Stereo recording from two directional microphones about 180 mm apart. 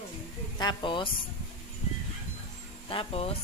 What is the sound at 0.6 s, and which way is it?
Speech, 25° left (ahead or behind).